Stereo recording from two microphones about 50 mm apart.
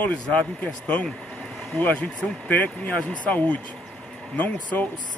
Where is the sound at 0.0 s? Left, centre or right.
Left.